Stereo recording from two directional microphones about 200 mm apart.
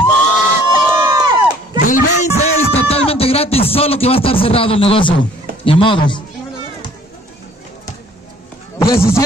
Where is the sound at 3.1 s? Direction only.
30° left (ahead or behind).